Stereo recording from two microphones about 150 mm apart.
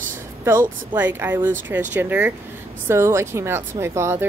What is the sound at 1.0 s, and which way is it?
Speech, 10° right (ahead or behind).